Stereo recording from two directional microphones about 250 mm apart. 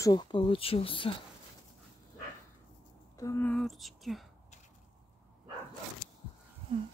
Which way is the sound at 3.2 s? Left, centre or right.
Centre.